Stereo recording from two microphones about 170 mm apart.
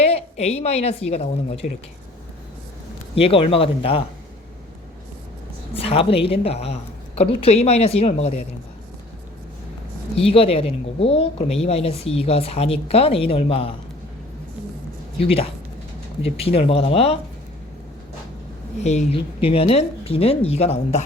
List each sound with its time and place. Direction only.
0.0 s a woman's voice: 40° left (ahead or behind)
3.2 s speech: 35° left (ahead or behind)
5.7 s speech: 35° left (ahead or behind)
10.2 s speech: 35° left (ahead or behind)
15.2 s speech: 35° left (ahead or behind)
18.8 s speech: 40° left (ahead or behind)